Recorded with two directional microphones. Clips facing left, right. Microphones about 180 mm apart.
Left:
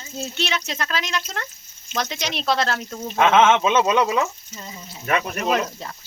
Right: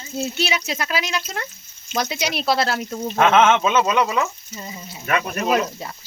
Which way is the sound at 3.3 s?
15° left (ahead or behind).